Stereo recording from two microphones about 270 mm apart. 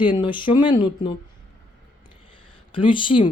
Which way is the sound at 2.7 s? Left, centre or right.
Centre.